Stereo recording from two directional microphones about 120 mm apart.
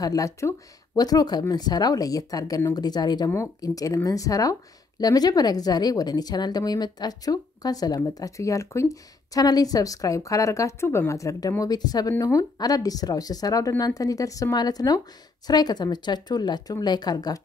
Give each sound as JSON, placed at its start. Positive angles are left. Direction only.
{"t": 0.0, "sound": "a woman's voice", "side_deg": 30}